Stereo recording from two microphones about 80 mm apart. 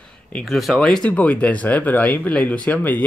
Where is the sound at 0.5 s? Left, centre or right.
Centre.